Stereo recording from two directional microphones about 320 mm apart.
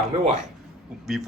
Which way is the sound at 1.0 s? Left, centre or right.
Centre.